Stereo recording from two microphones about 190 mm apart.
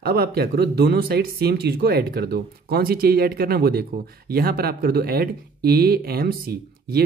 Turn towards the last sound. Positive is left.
turn(degrees=-55)  # may be behind; listen again after turning